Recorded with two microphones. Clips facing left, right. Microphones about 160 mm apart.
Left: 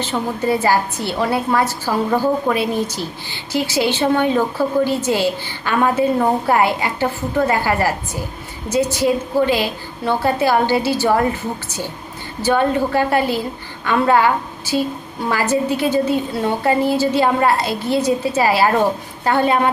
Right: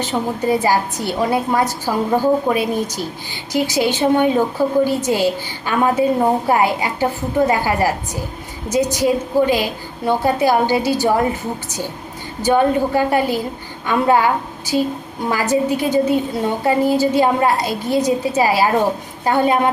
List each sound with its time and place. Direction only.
0.0 s a woman's voice: 15° right (ahead or behind)
12.4 s a woman's voice: 15° right (ahead or behind)
15.3 s a woman's voice: 15° right (ahead or behind)